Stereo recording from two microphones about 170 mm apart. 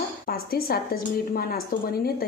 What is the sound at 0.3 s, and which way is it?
Speech, 60° left (ahead or behind).